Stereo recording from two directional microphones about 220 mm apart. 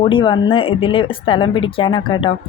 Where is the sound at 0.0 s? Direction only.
20° left (ahead or behind).